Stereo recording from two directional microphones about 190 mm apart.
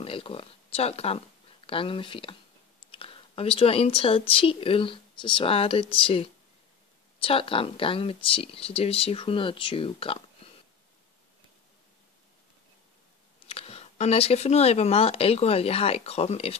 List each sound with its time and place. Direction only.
0.0 s speech: 30° left (ahead or behind)
13.5 s speech: 30° left (ahead or behind)